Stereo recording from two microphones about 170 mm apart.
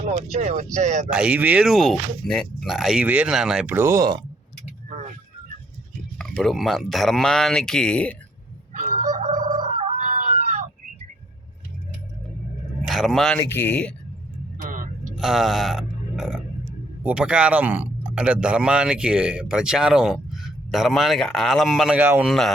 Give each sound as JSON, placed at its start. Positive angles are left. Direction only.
{"t": 0.1, "sound": "speech", "side_deg": -40}
{"t": 1.1, "sound": "speech", "side_deg": -5}
{"t": 6.1, "sound": "speech", "side_deg": 5}
{"t": 8.7, "sound": "a sound", "side_deg": -55}
{"t": 12.9, "sound": "speech", "side_deg": 0}
{"t": 14.6, "sound": "vehicle", "side_deg": -50}
{"t": 15.2, "sound": "speech", "side_deg": 0}
{"t": 22.3, "sound": "speech", "side_deg": 0}